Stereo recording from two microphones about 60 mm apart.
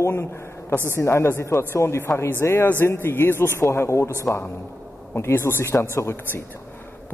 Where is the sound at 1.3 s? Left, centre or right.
Left.